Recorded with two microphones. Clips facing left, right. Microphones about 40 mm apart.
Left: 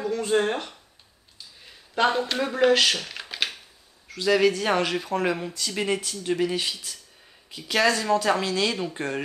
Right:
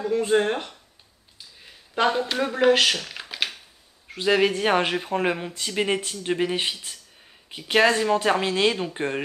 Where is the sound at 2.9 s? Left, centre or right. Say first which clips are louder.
Right 1 dB; centre.